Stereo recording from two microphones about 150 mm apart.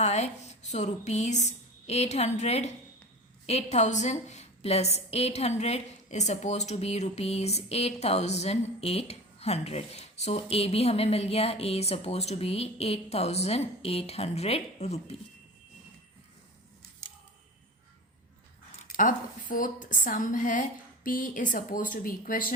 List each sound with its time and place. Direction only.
0.0 s a woman's voice: 45° left (ahead or behind)
18.9 s a woman's voice: 60° left (ahead or behind)